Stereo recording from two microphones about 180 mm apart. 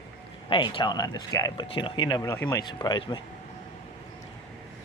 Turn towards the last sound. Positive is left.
turn(degrees=25)  # may be behind; listen again after turning